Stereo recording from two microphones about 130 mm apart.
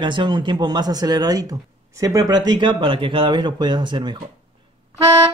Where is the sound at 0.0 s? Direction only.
35° right (ahead or behind).